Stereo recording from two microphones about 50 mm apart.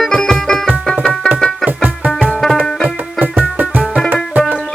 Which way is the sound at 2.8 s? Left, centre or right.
Right.